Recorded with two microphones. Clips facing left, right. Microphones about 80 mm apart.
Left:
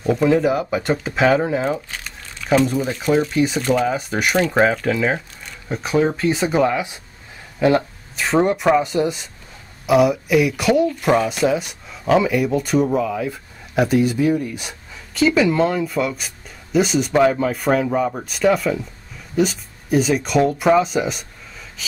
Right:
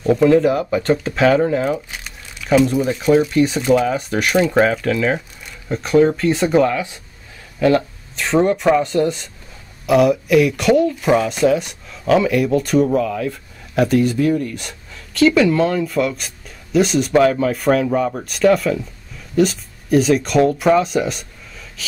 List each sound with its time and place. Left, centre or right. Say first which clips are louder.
0.0 s speech: right 3 dB; centre
2.5 s speech: right 3 dB; centre
6.7 s speech: even; centre
8.2 s speech: right 1 dB; centre
21.8 s a sound: right 1 dB; centre